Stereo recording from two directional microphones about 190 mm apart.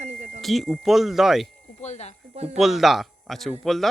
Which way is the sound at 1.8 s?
35° left (ahead or behind).